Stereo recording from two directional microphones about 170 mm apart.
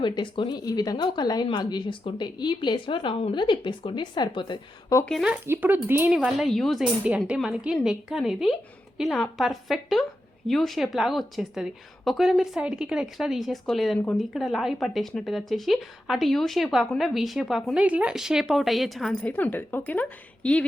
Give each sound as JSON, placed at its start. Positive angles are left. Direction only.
{"t": 0.0, "sound": "speech", "side_deg": 25}
{"t": 5.0, "sound": "speech", "side_deg": 0}
{"t": 6.1, "sound": "a woman's voice", "side_deg": 0}